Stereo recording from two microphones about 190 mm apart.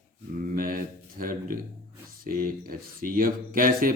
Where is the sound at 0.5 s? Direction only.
45° right (ahead or behind).